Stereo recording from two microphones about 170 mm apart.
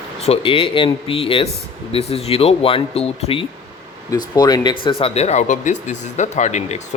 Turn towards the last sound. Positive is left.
turn(degrees=45)  # may be behind; listen again after turning